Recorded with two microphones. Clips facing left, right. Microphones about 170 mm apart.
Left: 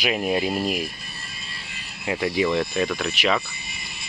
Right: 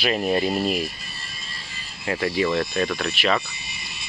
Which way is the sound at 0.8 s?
55° left (ahead or behind).